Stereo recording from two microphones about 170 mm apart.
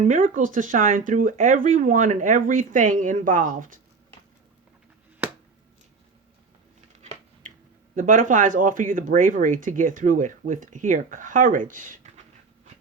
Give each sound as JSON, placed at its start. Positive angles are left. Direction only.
{"t": 0.0, "sound": "speech", "side_deg": -50}
{"t": 7.0, "sound": "a sound", "side_deg": -40}
{"t": 7.9, "sound": "speech", "side_deg": -50}